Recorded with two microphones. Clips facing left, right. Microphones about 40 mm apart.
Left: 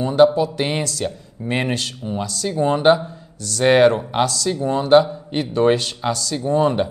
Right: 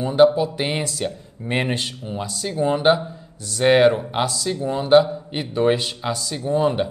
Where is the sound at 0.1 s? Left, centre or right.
Centre.